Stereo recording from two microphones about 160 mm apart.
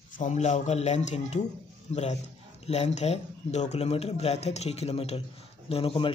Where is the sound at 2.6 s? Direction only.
40° left (ahead or behind).